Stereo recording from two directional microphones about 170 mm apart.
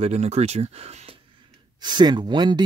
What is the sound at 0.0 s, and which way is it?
A man's voice, 40° right (ahead or behind).